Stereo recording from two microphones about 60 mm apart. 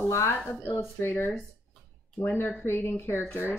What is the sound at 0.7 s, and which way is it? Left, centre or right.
Speech, left.